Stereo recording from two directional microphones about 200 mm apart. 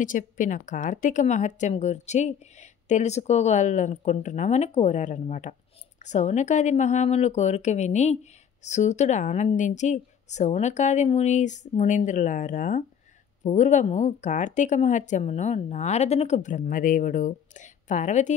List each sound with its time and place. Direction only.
0.0 s speech: 40° left (ahead or behind)